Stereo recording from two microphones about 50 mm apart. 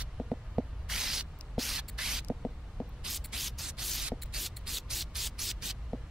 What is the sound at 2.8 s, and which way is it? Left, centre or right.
Spray, centre.